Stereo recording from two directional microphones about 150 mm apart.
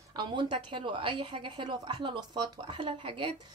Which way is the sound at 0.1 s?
30° right (ahead or behind).